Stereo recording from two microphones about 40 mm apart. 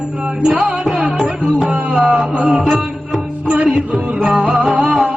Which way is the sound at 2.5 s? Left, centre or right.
Right.